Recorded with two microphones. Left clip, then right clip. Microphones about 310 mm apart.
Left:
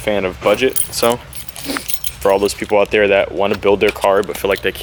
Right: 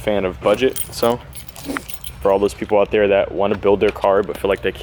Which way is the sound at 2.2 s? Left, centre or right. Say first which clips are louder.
Left 2 dB; centre.